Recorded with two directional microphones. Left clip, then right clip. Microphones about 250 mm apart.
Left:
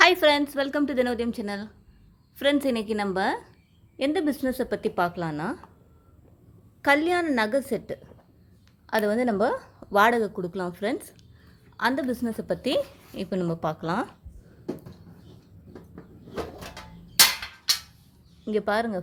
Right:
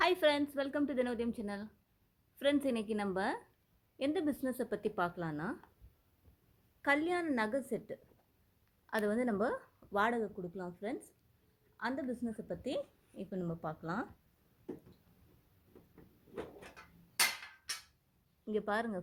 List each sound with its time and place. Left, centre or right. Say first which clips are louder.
0.0 s speech: left 12 dB; centre
6.8 s a woman's voice: left 11 dB; centre
16.3 s cupboard open or close: left 12 dB; centre
17.7 s a sound: left 19 dB; left
18.4 s speech: left 11 dB; centre